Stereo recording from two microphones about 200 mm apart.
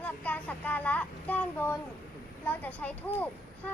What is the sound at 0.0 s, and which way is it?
Speech, 10° left (ahead or behind).